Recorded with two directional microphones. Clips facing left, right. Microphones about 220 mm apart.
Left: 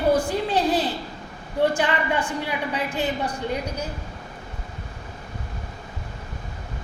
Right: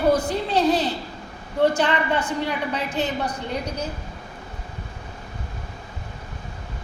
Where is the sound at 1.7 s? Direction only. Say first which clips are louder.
Right 1 dB; 10° left (ahead or behind).